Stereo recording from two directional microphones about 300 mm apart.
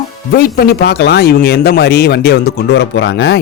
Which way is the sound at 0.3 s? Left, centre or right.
Left.